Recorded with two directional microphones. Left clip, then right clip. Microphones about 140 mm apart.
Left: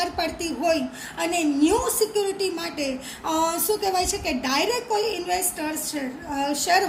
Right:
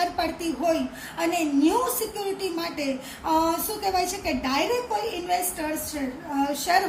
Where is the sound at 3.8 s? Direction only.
40° left (ahead or behind).